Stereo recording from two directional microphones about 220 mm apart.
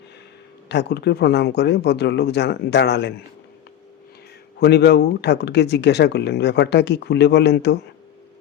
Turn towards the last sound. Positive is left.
turn(degrees=50)  # may be behind; listen again after turning